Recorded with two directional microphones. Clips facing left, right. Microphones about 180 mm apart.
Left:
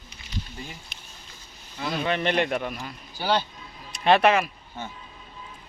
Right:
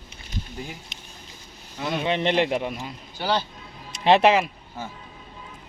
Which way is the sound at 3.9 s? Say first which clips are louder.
Right 2 dB; 25° right (ahead or behind).